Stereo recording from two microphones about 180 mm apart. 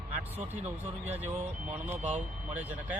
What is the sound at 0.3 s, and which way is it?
Speech, 35° right (ahead or behind).